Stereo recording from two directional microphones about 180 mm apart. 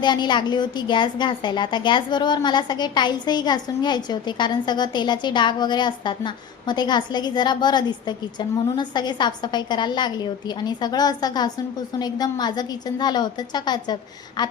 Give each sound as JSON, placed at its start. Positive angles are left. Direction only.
{"t": 0.0, "sound": "a woman's voice", "side_deg": 25}